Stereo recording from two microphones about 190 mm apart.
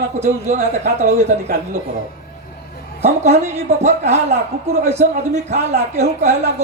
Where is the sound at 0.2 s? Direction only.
35° right (ahead or behind).